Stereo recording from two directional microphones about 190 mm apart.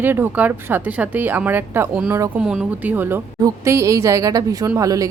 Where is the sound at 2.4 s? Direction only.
5° right (ahead or behind).